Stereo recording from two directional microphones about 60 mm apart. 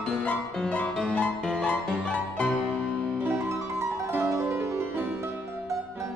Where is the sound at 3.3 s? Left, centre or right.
Right.